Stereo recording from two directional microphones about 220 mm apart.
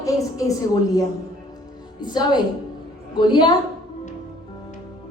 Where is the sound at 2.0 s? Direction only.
20° left (ahead or behind).